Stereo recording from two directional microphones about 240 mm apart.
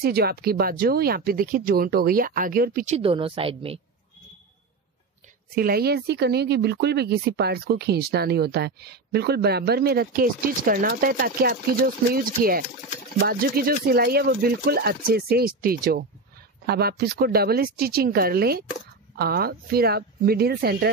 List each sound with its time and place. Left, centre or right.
0.0 s speech: right
5.5 s speech: right